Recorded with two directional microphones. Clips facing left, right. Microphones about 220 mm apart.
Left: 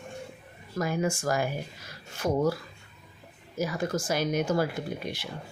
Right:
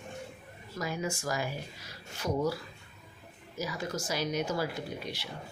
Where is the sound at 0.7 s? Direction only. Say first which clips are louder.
Left 6 dB; 50° left (ahead or behind).